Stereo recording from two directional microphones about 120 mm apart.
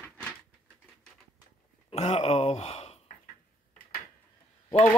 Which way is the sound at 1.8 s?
60° left (ahead or behind).